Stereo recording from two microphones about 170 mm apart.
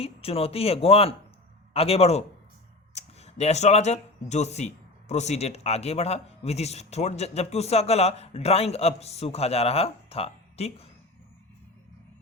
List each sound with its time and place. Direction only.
0.0 s speech: 35° left (ahead or behind)